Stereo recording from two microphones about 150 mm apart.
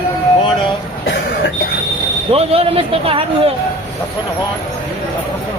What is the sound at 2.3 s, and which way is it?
Speech, 40° right (ahead or behind).